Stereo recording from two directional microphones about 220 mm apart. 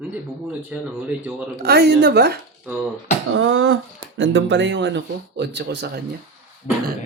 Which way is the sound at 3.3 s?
65° right (ahead or behind).